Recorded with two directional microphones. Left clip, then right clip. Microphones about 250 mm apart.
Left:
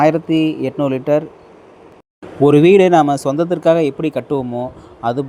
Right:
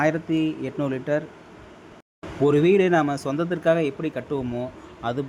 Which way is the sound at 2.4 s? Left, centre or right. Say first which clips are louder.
Left 9 dB; left.